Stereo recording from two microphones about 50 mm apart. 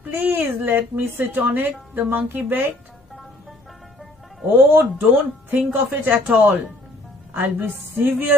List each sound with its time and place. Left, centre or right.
0.0 s a sound: right
0.7 s speech: right
4.6 s speech: right